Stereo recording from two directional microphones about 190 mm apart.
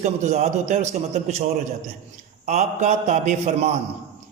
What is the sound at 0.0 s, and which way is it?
A man's voice, 35° right (ahead or behind).